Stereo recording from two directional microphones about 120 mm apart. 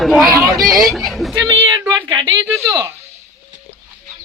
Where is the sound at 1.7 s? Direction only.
40° right (ahead or behind).